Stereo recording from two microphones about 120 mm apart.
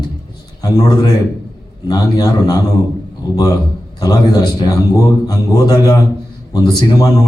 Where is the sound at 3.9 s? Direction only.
30° left (ahead or behind).